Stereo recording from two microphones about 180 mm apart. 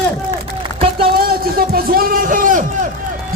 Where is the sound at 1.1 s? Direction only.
55° right (ahead or behind).